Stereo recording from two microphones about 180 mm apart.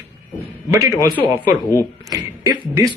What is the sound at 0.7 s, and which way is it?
Speech, 20° right (ahead or behind).